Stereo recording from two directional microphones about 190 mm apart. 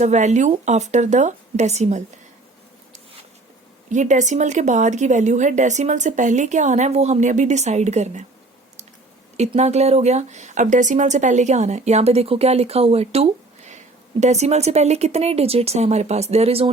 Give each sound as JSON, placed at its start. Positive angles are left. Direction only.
{"t": 0.0, "sound": "speech", "side_deg": -40}
{"t": 3.8, "sound": "speech", "side_deg": -40}
{"t": 9.4, "sound": "speech", "side_deg": -35}